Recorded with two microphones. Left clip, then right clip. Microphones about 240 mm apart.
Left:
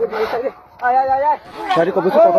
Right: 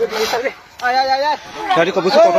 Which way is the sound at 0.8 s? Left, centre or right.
Right.